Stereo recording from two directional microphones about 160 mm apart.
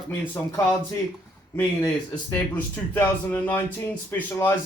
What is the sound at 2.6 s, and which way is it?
Speech, 10° left (ahead or behind).